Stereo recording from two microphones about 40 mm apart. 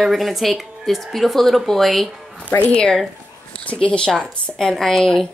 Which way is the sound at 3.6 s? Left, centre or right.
Left.